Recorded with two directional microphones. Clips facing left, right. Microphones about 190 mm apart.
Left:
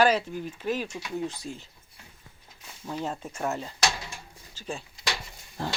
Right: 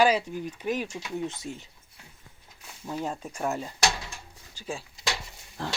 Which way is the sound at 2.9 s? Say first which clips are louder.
Even; 10° right (ahead or behind).